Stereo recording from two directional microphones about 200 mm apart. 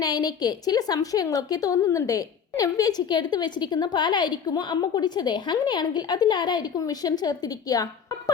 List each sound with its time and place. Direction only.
0.0 s a woman's voice: 20° left (ahead or behind)